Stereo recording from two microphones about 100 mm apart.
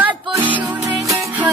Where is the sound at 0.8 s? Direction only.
35° right (ahead or behind).